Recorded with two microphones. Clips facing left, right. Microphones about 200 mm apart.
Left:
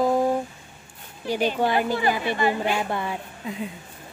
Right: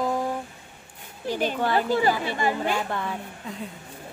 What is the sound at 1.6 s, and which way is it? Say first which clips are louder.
A woman's voice: even; 15° left (ahead or behind).